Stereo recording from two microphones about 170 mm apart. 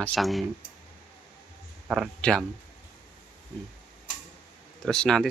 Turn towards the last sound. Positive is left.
turn(degrees=5)  # may be behind; listen again after turning